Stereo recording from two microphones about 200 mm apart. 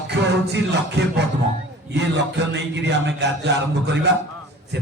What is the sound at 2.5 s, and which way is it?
A man's voice, 60° right (ahead or behind).